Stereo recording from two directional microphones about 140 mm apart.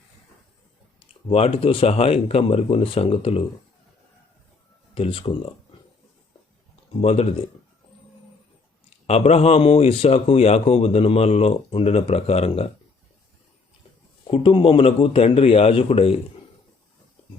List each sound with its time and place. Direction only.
0.9 s a man's voice: 45° left (ahead or behind)
4.9 s speech: 40° left (ahead or behind)
6.9 s a man's voice: 45° left (ahead or behind)
9.0 s a man's voice: 50° left (ahead or behind)
14.3 s a man's voice: 40° left (ahead or behind)